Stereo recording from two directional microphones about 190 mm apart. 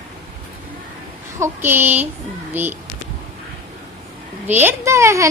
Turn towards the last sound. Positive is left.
turn(degrees=-15)  # may be behind; listen again after turning